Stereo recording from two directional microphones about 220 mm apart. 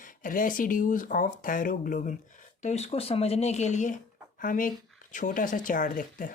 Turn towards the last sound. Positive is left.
turn(degrees=40)  # may be behind; listen again after turning